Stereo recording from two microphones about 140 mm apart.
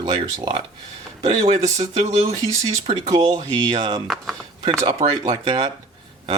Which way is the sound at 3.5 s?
35° right (ahead or behind).